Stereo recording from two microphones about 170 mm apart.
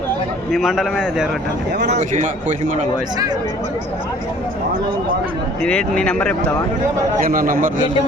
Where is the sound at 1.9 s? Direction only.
45° right (ahead or behind).